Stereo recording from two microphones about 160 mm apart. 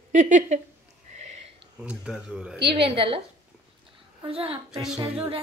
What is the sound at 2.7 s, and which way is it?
Speech, 35° right (ahead or behind).